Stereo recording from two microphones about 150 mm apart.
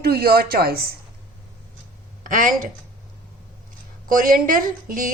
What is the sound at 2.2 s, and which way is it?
Speech, 60° right (ahead or behind).